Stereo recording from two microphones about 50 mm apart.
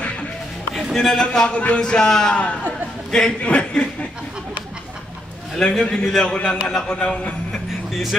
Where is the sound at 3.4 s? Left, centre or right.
Left.